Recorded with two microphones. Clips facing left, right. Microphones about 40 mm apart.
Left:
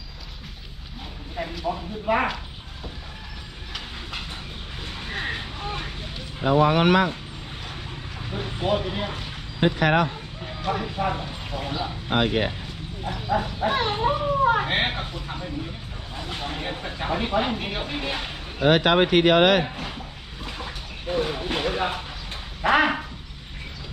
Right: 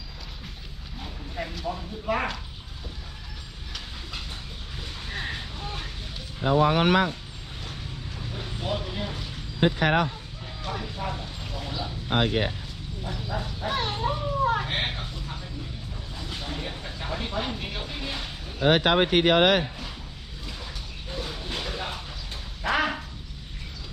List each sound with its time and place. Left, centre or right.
1.4 s speech: centre
1.6 s speech: centre
5.0 s vehicle: left
6.5 s speech: left
8.2 s a sound: left
10.4 s speech: left
12.1 s speech: left
13.1 s speech: left
18.8 s speech: left
19.6 s speech: left
20.4 s a sound: left